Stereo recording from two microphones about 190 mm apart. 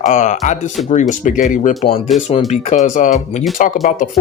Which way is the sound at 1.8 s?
30° left (ahead or behind).